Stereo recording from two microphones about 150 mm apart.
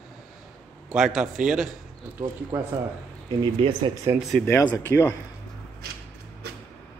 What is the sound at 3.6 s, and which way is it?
Speech, 35° right (ahead or behind).